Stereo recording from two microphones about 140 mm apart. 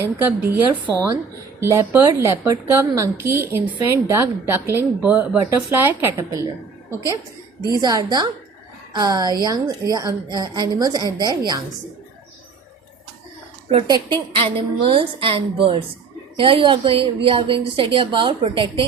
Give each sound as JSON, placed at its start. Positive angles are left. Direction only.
{"t": 0.0, "sound": "a woman's voice", "side_deg": -15}
{"t": 7.7, "sound": "a woman's voice", "side_deg": -30}
{"t": 13.7, "sound": "a woman's voice", "side_deg": -45}